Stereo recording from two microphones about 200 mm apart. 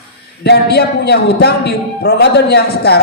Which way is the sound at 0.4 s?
55° left (ahead or behind).